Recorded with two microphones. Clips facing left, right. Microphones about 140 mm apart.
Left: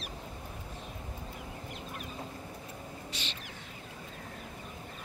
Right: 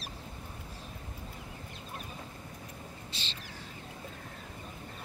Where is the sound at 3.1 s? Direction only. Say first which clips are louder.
Left 3 dB; 30° right (ahead or behind).